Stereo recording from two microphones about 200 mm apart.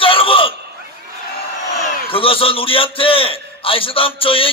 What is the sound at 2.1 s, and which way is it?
A man's voice, 25° left (ahead or behind).